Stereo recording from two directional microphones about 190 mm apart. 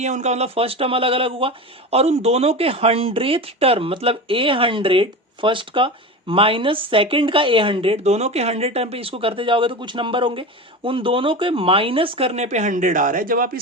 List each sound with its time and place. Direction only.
0.0 s speech: 35° right (ahead or behind)